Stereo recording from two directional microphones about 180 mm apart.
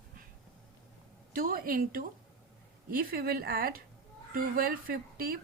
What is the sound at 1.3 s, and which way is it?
A woman's voice, 50° right (ahead or behind).